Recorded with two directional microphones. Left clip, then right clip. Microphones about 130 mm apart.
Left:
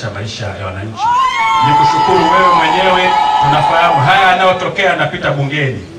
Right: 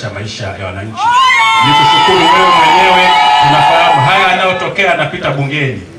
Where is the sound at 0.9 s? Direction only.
30° right (ahead or behind).